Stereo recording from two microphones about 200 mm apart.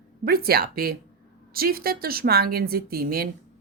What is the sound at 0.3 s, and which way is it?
Speech, 50° right (ahead or behind).